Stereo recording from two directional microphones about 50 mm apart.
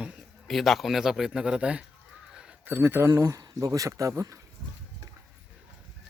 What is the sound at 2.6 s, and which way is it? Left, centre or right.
Speech, right.